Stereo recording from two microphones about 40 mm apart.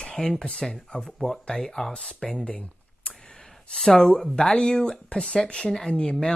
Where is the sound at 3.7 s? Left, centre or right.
Centre.